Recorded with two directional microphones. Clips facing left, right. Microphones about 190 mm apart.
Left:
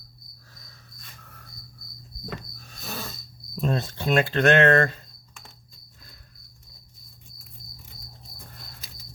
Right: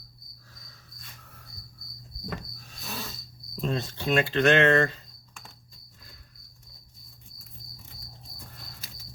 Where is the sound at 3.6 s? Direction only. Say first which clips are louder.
Left 3 dB; 50° left (ahead or behind).